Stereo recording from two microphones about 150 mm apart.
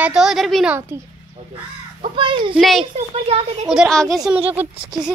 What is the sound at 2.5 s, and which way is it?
A woman's voice, centre (ahead or behind).